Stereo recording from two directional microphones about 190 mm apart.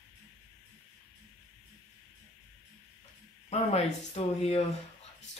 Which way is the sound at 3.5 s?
35° left (ahead or behind).